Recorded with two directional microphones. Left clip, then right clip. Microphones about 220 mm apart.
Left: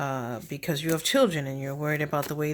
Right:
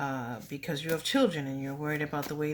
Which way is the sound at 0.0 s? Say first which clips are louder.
Left 4 dB; 45° left (ahead or behind).